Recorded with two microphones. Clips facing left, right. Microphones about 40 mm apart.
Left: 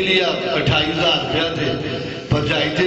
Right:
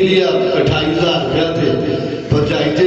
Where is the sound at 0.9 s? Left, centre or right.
Left.